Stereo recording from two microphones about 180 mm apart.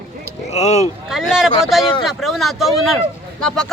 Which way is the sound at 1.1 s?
Centre (ahead or behind).